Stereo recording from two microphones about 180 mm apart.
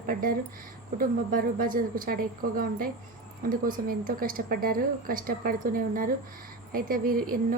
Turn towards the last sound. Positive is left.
turn(degrees=-50)  # may be behind; listen again after turning